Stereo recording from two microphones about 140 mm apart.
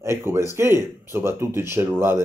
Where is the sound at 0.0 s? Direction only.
20° right (ahead or behind).